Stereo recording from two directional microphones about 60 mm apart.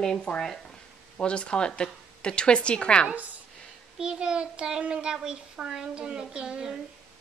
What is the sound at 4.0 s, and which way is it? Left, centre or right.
A child's voice, centre.